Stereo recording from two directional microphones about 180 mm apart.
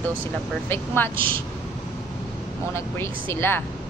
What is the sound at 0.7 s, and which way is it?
Speech, 10° left (ahead or behind).